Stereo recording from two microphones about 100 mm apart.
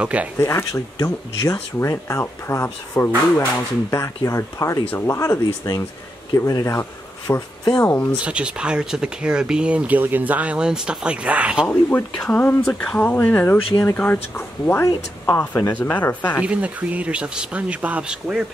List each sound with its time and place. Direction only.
0.0 s speech: 15° right (ahead or behind)
0.4 s speech: 25° left (ahead or behind)
8.2 s speech: 10° right (ahead or behind)
11.6 s speech: 15° left (ahead or behind)
16.4 s speech: 15° right (ahead or behind)